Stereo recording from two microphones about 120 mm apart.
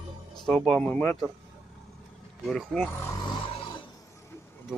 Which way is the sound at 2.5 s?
5° left (ahead or behind).